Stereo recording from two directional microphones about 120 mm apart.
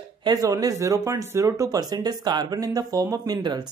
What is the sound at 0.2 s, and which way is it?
Speech, 35° right (ahead or behind).